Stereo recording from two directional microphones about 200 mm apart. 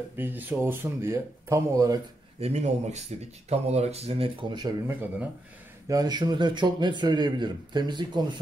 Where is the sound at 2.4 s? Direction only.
30° right (ahead or behind).